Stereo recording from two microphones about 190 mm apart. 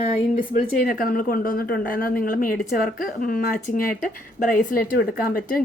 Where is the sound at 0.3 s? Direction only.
45° left (ahead or behind).